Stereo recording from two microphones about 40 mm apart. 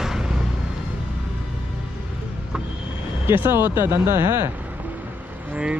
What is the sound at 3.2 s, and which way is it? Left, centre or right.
Speech, right.